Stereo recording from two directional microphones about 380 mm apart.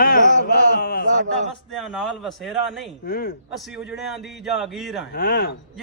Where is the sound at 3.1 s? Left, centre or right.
Left.